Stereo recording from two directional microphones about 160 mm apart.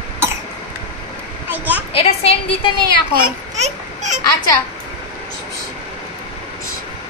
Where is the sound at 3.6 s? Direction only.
45° right (ahead or behind).